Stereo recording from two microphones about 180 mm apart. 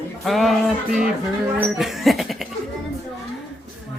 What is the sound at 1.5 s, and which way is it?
Speech, centre (ahead or behind).